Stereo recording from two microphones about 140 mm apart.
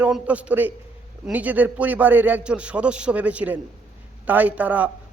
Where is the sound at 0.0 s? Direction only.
10° right (ahead or behind).